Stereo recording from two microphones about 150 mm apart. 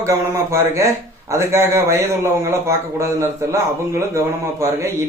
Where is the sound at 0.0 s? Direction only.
20° right (ahead or behind).